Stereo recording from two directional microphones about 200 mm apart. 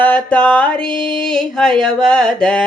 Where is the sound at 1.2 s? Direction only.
Centre (ahead or behind).